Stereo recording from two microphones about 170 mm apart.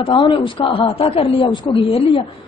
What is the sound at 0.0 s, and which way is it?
A woman's voice, 30° left (ahead or behind).